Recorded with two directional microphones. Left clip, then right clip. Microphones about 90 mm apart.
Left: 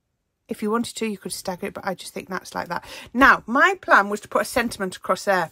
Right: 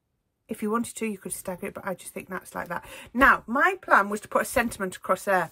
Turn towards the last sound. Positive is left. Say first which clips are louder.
# left 3 dB
turn(degrees=10)  # may be behind; listen again after turning